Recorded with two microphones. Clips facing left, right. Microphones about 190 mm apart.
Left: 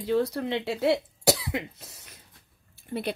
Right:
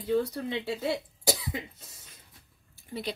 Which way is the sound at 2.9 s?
60° left (ahead or behind).